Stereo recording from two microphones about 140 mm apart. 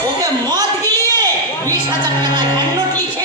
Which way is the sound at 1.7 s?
30° right (ahead or behind).